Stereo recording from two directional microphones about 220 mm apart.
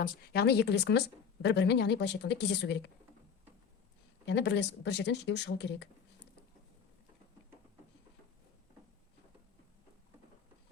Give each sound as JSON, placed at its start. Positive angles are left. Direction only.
{"t": 0.0, "sound": "speech", "side_deg": 45}
{"t": 4.3, "sound": "speech", "side_deg": 50}